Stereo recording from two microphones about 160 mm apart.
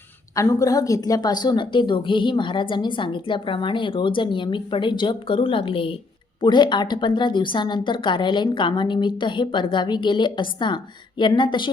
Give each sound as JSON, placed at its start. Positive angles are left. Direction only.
{"t": 0.3, "sound": "a woman's voice", "side_deg": 20}